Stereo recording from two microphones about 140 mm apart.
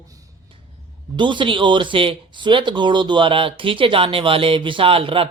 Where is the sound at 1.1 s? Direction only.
35° right (ahead or behind).